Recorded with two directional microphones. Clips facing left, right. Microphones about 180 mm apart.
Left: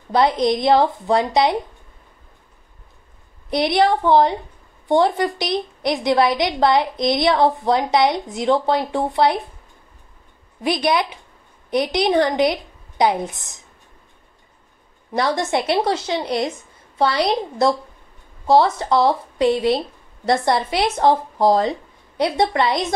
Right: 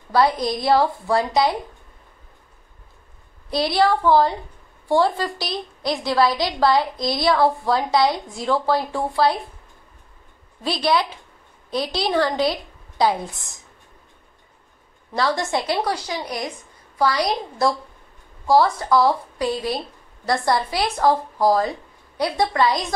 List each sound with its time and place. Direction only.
0.1 s a woman's voice: 20° left (ahead or behind)
3.4 s a woman's voice: 20° left (ahead or behind)
10.6 s a woman's voice: 20° left (ahead or behind)
15.1 s a woman's voice: 20° left (ahead or behind)